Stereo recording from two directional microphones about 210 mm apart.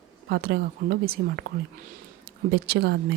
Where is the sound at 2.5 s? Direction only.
50° right (ahead or behind).